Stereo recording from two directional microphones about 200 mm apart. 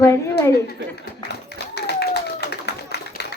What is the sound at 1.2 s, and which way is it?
Clapping, 55° left (ahead or behind).